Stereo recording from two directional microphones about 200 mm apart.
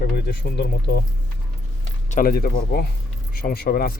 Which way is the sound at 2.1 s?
45° left (ahead or behind).